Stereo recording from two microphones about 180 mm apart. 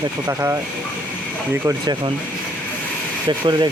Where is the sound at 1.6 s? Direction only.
20° right (ahead or behind).